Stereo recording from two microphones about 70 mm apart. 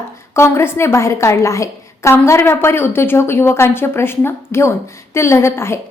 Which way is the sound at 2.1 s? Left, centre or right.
Left.